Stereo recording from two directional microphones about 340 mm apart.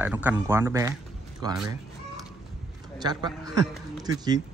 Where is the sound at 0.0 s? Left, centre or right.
Centre.